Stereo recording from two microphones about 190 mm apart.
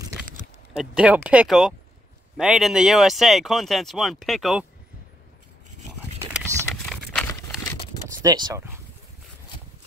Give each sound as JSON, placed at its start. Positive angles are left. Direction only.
{"t": 0.7, "sound": "speech", "side_deg": -5}
{"t": 6.5, "sound": "a sound", "side_deg": 5}
{"t": 8.2, "sound": "speech", "side_deg": -20}